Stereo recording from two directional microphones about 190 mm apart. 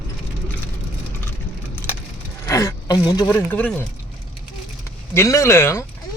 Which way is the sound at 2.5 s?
15° left (ahead or behind).